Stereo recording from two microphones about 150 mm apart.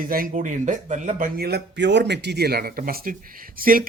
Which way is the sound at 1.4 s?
90° right.